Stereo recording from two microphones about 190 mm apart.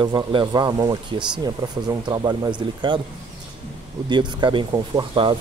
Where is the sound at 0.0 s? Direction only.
25° right (ahead or behind).